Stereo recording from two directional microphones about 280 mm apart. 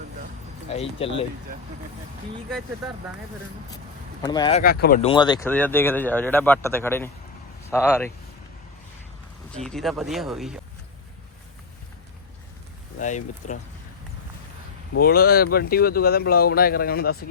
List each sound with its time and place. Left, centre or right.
0.7 s speech: left
4.2 s speech: centre
4.6 s speech: left
5.0 s speech: centre
9.6 s speech: centre
13.0 s speech: left
14.9 s speech: left